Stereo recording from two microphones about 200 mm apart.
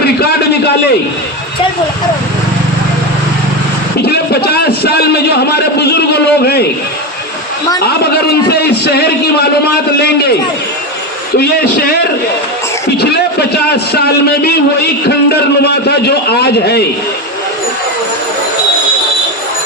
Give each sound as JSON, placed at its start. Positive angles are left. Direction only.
{"t": 0.0, "sound": "a man's voice", "side_deg": 55}
{"t": 4.0, "sound": "a man's voice", "side_deg": 55}
{"t": 7.9, "sound": "a man's voice", "side_deg": 55}
{"t": 11.3, "sound": "a man's voice", "side_deg": 50}
{"t": 13.0, "sound": "a man's voice", "side_deg": 55}
{"t": 15.0, "sound": "a man's voice", "side_deg": 55}